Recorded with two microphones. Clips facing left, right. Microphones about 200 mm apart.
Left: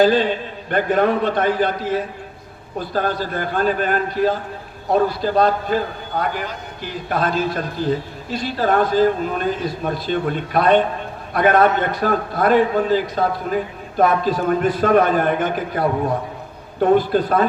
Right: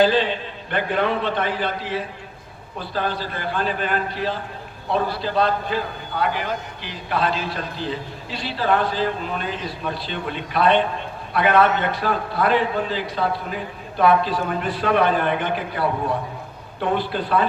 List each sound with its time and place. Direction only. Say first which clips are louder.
0.0 s a man's voice: left 3 dB; 45° left (ahead or behind)